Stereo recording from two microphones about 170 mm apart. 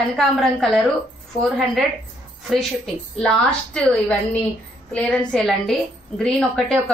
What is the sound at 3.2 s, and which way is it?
A woman's voice, 5° left (ahead or behind).